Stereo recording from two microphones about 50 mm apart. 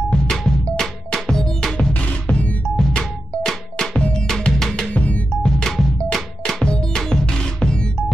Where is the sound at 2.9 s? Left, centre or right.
Centre.